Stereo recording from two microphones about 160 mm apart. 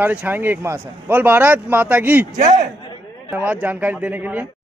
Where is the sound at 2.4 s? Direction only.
50° right (ahead or behind).